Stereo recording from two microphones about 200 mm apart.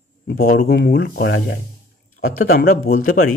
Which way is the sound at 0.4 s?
50° left (ahead or behind).